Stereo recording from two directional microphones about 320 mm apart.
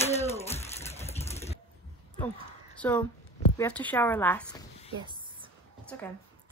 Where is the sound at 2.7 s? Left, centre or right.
Centre.